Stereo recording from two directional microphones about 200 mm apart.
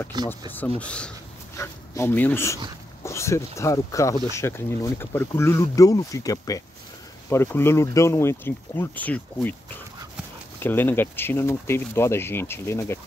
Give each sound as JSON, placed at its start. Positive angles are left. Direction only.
{"t": 0.1, "sound": "speech", "side_deg": -20}
{"t": 0.5, "sound": "speech", "side_deg": 5}
{"t": 10.6, "sound": "speech", "side_deg": 10}